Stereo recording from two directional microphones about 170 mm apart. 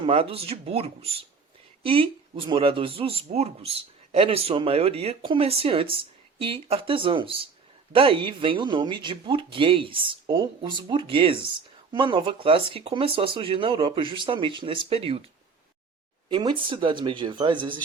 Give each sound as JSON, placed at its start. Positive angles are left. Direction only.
{"t": 0.0, "sound": "speech", "side_deg": -35}
{"t": 16.3, "sound": "speech", "side_deg": -30}